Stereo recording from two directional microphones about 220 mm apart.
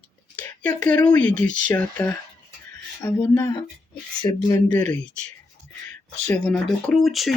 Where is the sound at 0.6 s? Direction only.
5° left (ahead or behind).